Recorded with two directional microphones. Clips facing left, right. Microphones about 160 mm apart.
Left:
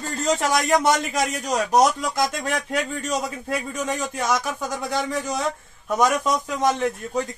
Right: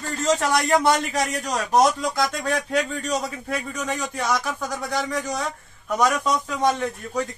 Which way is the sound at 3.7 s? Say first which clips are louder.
Left 1 dB; 25° left (ahead or behind).